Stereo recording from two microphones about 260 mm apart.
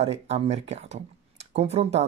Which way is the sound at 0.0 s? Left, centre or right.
Right.